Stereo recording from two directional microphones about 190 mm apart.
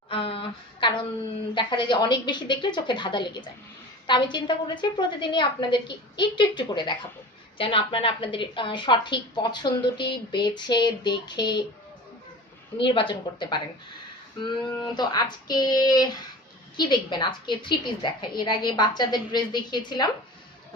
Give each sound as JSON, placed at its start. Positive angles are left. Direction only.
{"t": 0.1, "sound": "a sound", "side_deg": 30}
{"t": 1.5, "sound": "a woman's voice", "side_deg": 25}
{"t": 12.7, "sound": "a woman's voice", "side_deg": 25}
{"t": 14.8, "sound": "a woman's voice", "side_deg": 20}